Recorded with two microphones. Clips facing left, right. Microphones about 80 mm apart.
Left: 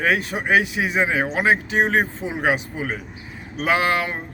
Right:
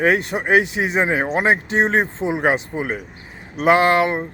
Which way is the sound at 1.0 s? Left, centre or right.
Right.